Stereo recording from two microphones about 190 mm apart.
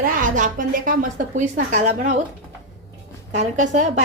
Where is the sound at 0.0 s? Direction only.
45° right (ahead or behind).